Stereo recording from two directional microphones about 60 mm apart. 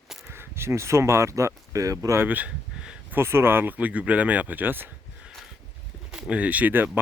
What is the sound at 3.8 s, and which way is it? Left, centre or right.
Speech, right.